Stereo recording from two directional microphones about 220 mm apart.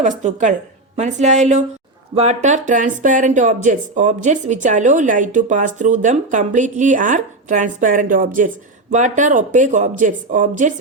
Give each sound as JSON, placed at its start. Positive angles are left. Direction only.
{"t": 0.2, "sound": "speech", "side_deg": -35}